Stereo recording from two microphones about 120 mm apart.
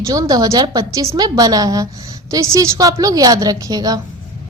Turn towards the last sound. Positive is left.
turn(degrees=-30)  # may be behind; listen again after turning